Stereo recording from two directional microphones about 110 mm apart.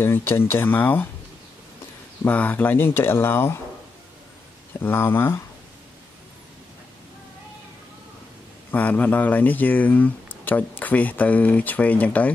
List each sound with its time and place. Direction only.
0.0 s speech: 20° left (ahead or behind)
2.2 s speech: 15° left (ahead or behind)
4.7 s speech: 20° left (ahead or behind)
8.7 s speech: 15° left (ahead or behind)